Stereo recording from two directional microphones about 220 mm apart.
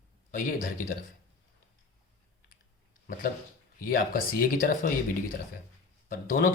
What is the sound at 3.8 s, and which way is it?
Speech, 40° left (ahead or behind).